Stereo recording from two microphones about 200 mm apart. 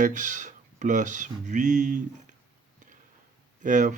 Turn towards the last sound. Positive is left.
turn(degrees=-40)  # may be behind; listen again after turning